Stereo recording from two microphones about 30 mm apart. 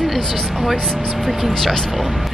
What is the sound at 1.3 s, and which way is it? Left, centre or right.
Speech, centre.